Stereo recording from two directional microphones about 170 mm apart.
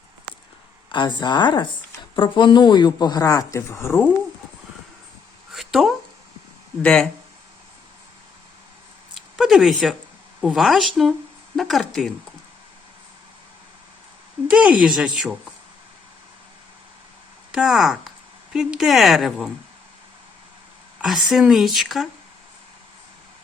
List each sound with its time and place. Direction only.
0.9 s speech: 25° left (ahead or behind)
5.5 s a sound: centre (ahead or behind)
6.8 s speech: 5° left (ahead or behind)
9.1 s a sound: centre (ahead or behind)
10.4 s speech: centre (ahead or behind)
14.4 s speech: 5° right (ahead or behind)
17.5 s speech: 5° right (ahead or behind)
21.0 s speech: 5° right (ahead or behind)